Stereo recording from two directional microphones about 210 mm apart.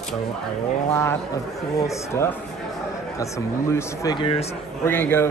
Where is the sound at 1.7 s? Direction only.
15° left (ahead or behind).